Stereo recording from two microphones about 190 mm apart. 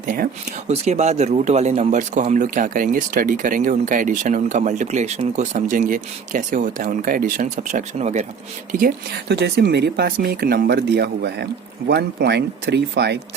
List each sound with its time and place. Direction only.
0.0 s speech: 45° right (ahead or behind)
9.3 s speech: 60° right (ahead or behind)